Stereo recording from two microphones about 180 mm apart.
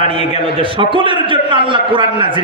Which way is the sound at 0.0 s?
30° right (ahead or behind).